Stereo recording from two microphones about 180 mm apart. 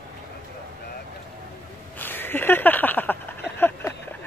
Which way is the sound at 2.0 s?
10° left (ahead or behind).